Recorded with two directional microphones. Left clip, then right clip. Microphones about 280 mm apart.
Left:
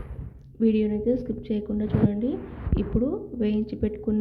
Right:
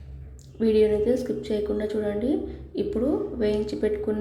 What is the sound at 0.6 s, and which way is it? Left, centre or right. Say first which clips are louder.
A woman's voice: right 4 dB; centre.